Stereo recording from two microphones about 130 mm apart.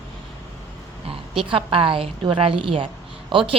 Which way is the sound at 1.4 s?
45° right (ahead or behind).